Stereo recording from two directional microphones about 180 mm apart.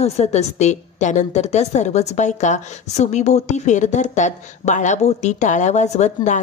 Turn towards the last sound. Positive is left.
turn(degrees=40)  # may be behind; listen again after turning